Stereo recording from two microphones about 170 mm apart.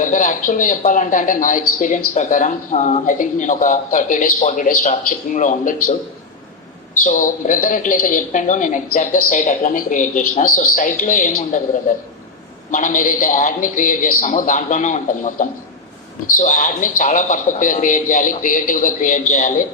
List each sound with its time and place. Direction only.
0.0 s speech: 50° left (ahead or behind)
7.0 s speech: 50° left (ahead or behind)